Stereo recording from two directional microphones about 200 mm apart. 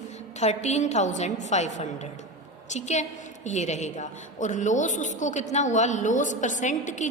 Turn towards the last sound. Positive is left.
turn(degrees=35)  # may be behind; listen again after turning